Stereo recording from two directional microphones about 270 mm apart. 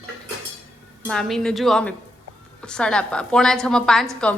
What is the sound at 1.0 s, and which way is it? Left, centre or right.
A woman's voice, centre.